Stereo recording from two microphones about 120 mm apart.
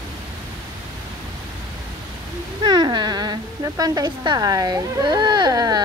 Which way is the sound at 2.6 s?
35° right (ahead or behind).